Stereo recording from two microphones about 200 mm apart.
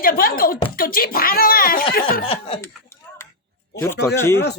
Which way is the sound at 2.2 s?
30° left (ahead or behind).